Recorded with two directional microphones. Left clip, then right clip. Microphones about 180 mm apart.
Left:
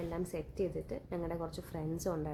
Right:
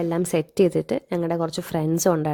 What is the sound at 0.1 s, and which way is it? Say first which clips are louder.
A woman's voice: right 16 dB; 50° right (ahead or behind).